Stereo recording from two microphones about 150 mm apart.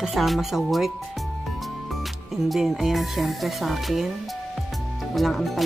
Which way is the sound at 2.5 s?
Centre (ahead or behind).